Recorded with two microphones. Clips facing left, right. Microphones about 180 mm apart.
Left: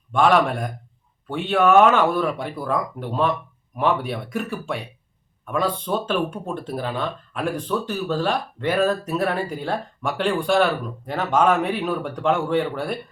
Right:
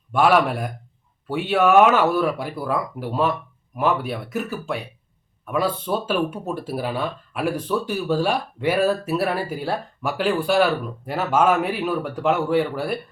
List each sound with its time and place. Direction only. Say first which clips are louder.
0.1 s speech: even; 5° right (ahead or behind)